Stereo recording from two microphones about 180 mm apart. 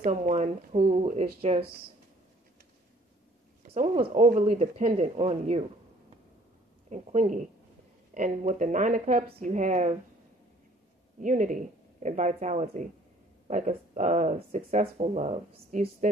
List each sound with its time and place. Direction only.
0.0 s speech: 40° right (ahead or behind)
3.7 s speech: 35° right (ahead or behind)
6.9 s speech: 45° right (ahead or behind)
11.1 s a woman's voice: 45° right (ahead or behind)